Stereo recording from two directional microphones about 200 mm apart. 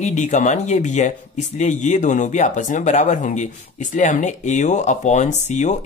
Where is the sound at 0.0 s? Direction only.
35° left (ahead or behind).